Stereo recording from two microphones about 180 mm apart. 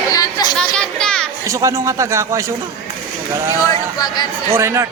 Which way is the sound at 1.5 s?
15° right (ahead or behind).